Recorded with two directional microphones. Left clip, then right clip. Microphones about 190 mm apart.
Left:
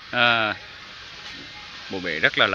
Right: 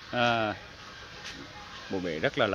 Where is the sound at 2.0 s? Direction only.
Centre (ahead or behind).